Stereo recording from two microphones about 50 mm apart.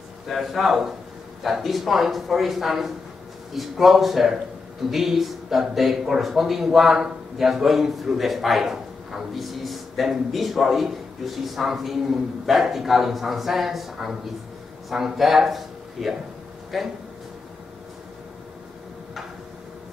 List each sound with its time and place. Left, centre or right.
0.3 s speech: centre
14.9 s speech: centre